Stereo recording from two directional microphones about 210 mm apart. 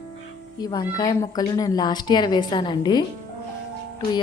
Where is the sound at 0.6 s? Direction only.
20° left (ahead or behind).